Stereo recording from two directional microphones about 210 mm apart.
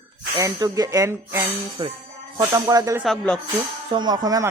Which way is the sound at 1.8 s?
25° right (ahead or behind).